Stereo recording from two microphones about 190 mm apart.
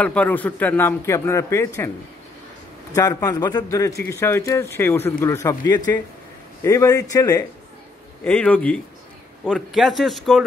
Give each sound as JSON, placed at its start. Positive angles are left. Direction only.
{"t": 0.0, "sound": "speech", "side_deg": 5}
{"t": 2.9, "sound": "a man's voice", "side_deg": 20}
{"t": 8.2, "sound": "speech", "side_deg": 5}